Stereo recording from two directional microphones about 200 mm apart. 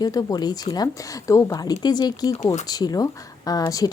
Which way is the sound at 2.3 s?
35° left (ahead or behind).